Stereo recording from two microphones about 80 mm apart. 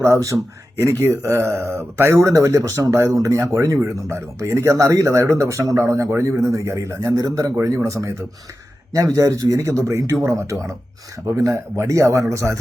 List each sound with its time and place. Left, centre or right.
0.0 s speech: right